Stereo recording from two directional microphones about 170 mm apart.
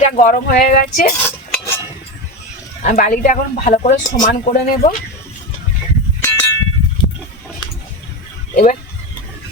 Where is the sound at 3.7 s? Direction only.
40° left (ahead or behind).